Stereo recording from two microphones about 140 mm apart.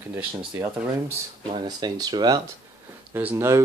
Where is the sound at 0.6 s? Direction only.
15° right (ahead or behind).